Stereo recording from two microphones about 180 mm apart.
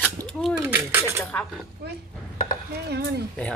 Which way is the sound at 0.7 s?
10° right (ahead or behind).